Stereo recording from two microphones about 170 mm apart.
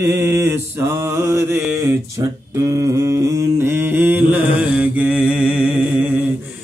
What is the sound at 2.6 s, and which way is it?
Mantra, 20° right (ahead or behind).